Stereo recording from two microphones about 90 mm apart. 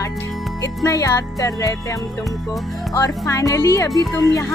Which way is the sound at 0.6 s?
35° left (ahead or behind).